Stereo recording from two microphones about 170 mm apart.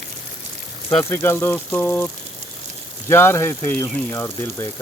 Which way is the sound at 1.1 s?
15° left (ahead or behind).